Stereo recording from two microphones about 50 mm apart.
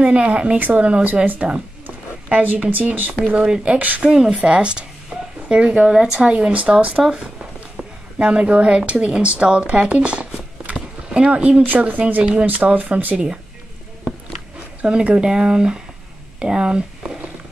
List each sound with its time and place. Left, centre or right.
0.0 s a woman's voice: right
0.6 s speech: right
3.4 s a woman's voice: centre
3.7 s speech: right
4.0 s a woman's voice: centre
8.2 s a woman's voice: right
14.8 s speech: right